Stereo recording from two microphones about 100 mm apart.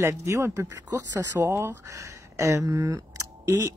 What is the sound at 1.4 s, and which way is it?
Speech, 25° right (ahead or behind).